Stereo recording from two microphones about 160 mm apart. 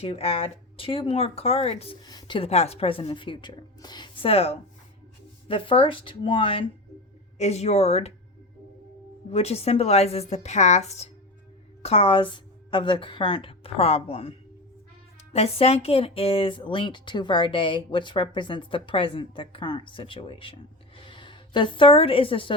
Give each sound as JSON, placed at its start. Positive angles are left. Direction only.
{"t": 0.0, "sound": "speech", "side_deg": 35}
{"t": 2.0, "sound": "speech", "side_deg": 25}
{"t": 7.3, "sound": "speech", "side_deg": 45}
{"t": 9.3, "sound": "a woman's voice", "side_deg": 40}